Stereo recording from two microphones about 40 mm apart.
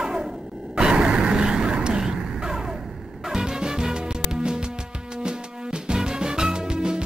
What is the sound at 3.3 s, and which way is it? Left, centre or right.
Music, centre.